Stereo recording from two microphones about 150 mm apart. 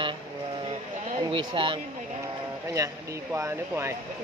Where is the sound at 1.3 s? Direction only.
35° right (ahead or behind).